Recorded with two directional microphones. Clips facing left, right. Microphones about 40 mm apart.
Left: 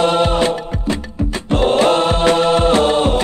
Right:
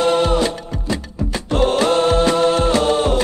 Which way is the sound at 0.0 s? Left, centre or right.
Left.